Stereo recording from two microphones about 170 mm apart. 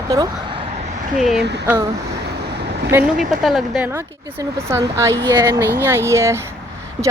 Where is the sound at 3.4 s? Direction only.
Centre (ahead or behind).